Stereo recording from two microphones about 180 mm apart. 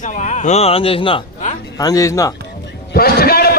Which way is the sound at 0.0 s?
45° left (ahead or behind).